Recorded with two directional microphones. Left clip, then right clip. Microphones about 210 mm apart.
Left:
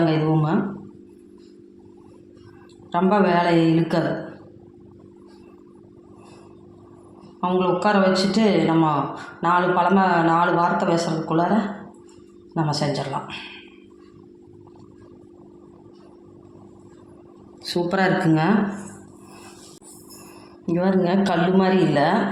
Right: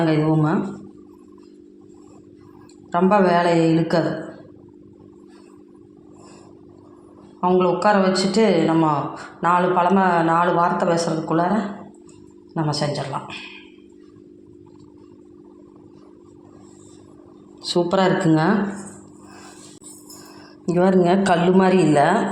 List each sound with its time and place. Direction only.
0.0 s a sound: 25° right (ahead or behind)
2.9 s a man's voice: 25° right (ahead or behind)
7.4 s a man's voice: 25° right (ahead or behind)
12.5 s a man's voice: 20° right (ahead or behind)
17.6 s a man's voice: 20° right (ahead or behind)
20.7 s a man's voice: 30° right (ahead or behind)